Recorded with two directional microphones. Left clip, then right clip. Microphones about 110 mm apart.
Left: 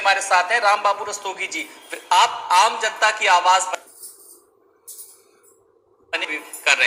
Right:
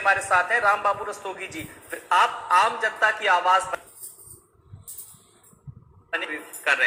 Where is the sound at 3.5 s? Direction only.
40° left (ahead or behind).